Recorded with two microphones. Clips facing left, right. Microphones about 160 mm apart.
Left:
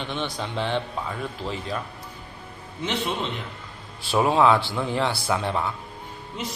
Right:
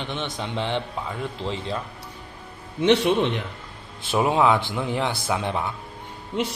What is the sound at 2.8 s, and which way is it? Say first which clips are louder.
Speech: right 10 dB; 75° right (ahead or behind).